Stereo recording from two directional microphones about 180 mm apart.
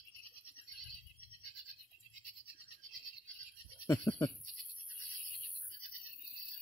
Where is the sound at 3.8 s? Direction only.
15° left (ahead or behind).